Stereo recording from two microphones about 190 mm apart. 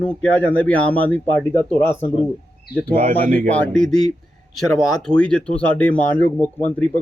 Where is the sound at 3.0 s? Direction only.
45° right (ahead or behind).